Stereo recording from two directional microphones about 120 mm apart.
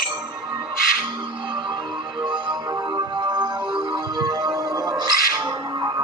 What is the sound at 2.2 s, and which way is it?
Music, 40° right (ahead or behind).